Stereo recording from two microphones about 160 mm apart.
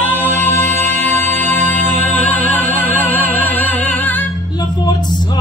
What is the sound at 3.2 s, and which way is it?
Music, 60° right (ahead or behind).